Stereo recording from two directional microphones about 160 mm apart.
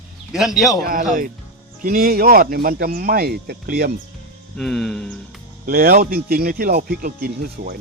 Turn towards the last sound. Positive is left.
turn(degrees=-65)  # may be behind; listen again after turning